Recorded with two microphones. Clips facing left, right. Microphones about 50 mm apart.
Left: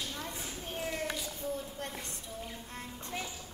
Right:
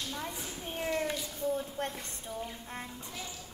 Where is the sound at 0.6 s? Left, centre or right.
Centre.